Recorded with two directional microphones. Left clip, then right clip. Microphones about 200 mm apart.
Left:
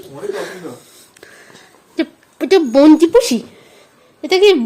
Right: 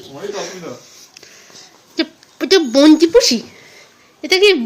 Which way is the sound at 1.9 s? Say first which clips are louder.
Even; 10° left (ahead or behind).